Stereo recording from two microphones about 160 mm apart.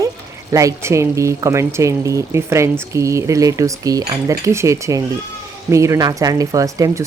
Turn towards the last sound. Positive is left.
turn(degrees=-20)  # may be behind; listen again after turning